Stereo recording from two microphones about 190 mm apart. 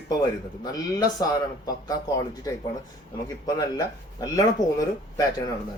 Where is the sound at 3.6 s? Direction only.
20° left (ahead or behind).